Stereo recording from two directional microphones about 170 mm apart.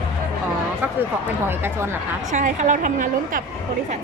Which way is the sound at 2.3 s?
45° right (ahead or behind).